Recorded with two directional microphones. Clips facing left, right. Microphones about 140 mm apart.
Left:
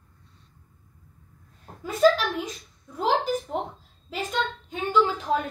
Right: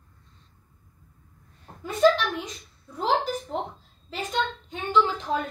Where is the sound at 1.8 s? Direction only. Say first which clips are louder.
Even; 5° left (ahead or behind).